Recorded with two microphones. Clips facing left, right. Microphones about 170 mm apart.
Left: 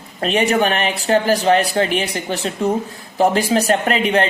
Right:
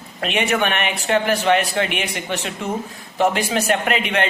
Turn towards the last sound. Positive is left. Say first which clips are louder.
# left 4 dB
turn(degrees=35)  # may be behind; listen again after turning